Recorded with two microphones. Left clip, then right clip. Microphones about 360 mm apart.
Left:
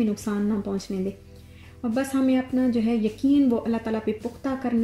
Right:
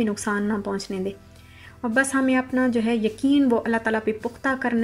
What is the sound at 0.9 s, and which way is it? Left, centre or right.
Speech, right.